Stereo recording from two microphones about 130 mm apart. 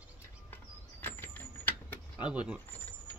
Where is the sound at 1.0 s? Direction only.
15° left (ahead or behind).